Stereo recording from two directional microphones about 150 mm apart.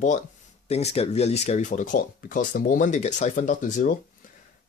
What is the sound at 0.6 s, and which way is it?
Speech, 45° left (ahead or behind).